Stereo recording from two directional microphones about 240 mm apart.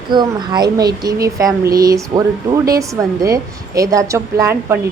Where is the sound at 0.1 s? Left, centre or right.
Centre.